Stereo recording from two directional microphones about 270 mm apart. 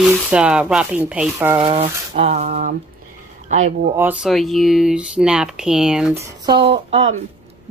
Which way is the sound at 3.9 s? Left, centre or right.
Centre.